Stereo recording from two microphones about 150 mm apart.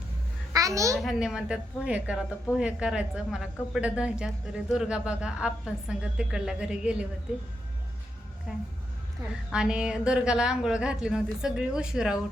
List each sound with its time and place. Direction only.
0.5 s a child's voice: 20° right (ahead or behind)
0.9 s speech: 5° right (ahead or behind)
8.5 s speech: 5° right (ahead or behind)